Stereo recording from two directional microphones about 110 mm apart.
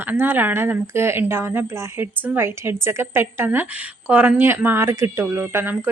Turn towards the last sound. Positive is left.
turn(degrees=-20)  # may be behind; listen again after turning